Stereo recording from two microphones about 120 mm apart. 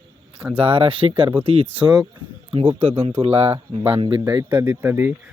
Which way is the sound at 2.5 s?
50° right (ahead or behind).